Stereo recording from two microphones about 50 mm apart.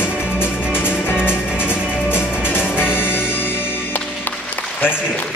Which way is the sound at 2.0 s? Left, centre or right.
Left.